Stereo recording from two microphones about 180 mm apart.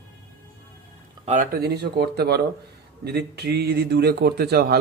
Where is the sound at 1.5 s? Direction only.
65° right (ahead or behind).